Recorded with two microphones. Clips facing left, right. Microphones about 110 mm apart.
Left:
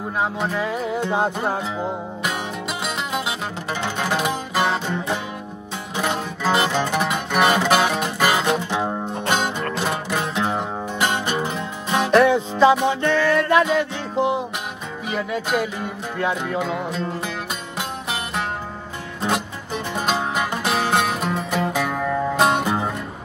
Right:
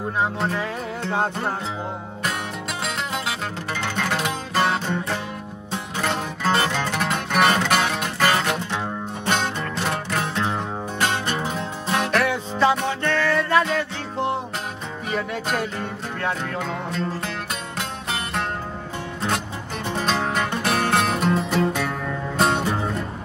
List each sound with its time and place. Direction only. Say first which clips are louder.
0.4 s music: left 2 dB; 10° left (ahead or behind)
2.8 s music: left 1 dB; 15° left (ahead or behind)
12.1 s music: left 7 dB; 25° left (ahead or behind); by 21.9 s 5° left (ahead or behind)